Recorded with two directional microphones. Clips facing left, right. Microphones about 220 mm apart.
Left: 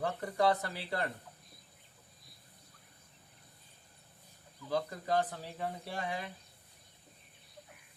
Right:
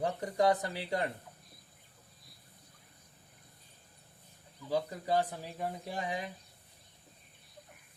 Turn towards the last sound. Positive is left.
turn(degrees=-15)  # may be behind; listen again after turning